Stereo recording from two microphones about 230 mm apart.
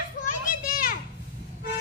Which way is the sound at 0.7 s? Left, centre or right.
Left.